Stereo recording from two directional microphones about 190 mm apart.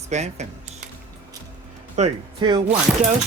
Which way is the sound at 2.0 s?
35° right (ahead or behind).